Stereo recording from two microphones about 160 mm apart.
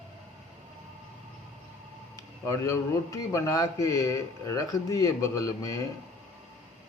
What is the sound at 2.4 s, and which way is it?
A man's voice, 20° left (ahead or behind).